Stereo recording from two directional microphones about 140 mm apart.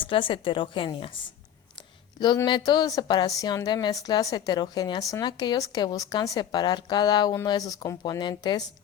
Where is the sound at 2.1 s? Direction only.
30° left (ahead or behind).